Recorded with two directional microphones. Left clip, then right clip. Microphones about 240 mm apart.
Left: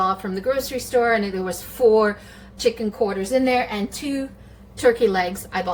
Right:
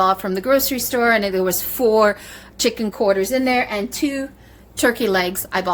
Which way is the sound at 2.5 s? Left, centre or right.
Right.